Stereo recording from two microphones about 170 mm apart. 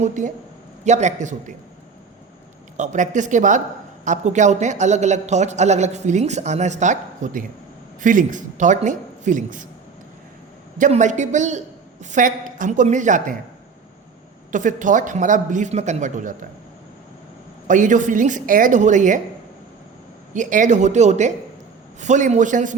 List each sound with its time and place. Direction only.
0.0 s a man's voice: 45° right (ahead or behind)
2.7 s a man's voice: 45° right (ahead or behind)
10.8 s a man's voice: 45° right (ahead or behind)
14.5 s a man's voice: 50° right (ahead or behind)
17.7 s a man's voice: 50° right (ahead or behind)
20.3 s a man's voice: 45° right (ahead or behind)